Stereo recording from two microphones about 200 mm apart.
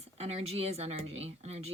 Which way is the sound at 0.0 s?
30° right (ahead or behind).